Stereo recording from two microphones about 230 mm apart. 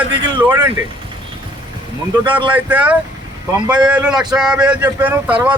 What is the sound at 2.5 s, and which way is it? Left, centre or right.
Speech, centre.